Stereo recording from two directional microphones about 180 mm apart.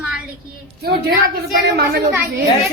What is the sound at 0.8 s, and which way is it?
Speech, 65° right (ahead or behind).